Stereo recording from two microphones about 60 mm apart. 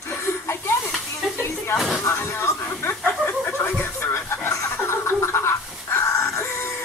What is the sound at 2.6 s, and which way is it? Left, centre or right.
Chicken, left.